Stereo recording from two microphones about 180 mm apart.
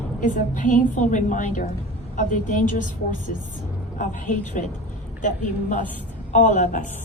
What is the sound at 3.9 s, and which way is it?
A woman's voice, 45° left (ahead or behind).